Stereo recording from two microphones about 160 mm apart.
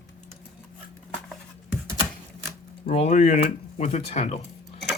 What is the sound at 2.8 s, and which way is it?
Speech, 45° left (ahead or behind).